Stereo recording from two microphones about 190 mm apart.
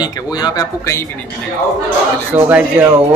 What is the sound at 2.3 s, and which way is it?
Speech, 10° right (ahead or behind).